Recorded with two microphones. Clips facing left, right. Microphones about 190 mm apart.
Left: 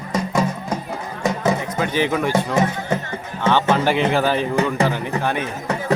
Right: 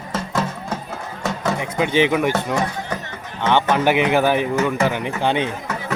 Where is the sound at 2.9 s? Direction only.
25° left (ahead or behind).